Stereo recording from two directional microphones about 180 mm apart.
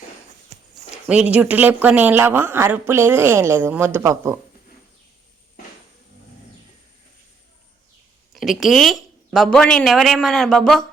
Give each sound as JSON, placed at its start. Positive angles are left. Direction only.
{"t": 0.5, "sound": "a sound", "side_deg": -35}
{"t": 1.0, "sound": "speech", "side_deg": -5}
{"t": 8.3, "sound": "speech", "side_deg": 0}